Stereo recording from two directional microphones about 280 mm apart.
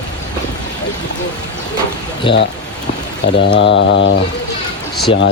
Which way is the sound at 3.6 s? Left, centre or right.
Left.